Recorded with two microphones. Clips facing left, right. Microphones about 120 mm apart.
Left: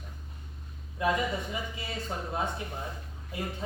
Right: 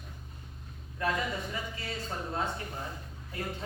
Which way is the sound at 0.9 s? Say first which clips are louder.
Left 3 dB; 15° left (ahead or behind).